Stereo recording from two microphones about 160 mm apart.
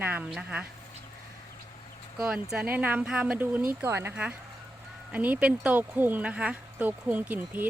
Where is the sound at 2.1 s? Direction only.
5° right (ahead or behind).